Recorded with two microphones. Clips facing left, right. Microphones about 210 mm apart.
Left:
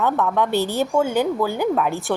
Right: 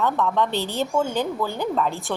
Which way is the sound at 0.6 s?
15° right (ahead or behind).